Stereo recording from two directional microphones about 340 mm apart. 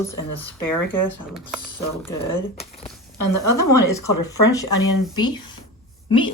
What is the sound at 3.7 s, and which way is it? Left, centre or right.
Speech, centre.